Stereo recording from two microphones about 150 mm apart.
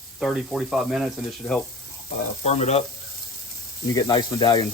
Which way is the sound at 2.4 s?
45° left (ahead or behind).